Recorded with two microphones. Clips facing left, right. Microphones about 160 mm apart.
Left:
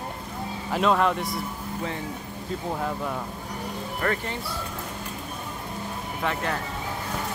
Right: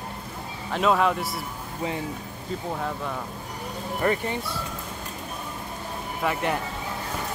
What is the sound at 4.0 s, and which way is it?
Speech, 20° right (ahead or behind).